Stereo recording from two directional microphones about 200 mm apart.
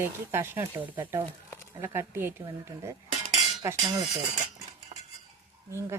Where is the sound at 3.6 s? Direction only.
15° right (ahead or behind).